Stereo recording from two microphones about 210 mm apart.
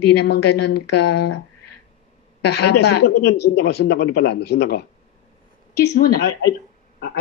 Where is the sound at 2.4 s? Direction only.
50° left (ahead or behind).